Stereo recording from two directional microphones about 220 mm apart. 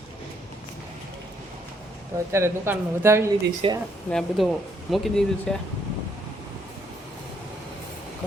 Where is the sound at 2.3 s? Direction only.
10° right (ahead or behind).